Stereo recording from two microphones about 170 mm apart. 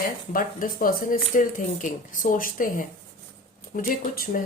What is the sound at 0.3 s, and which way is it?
A woman's voice, 55° left (ahead or behind).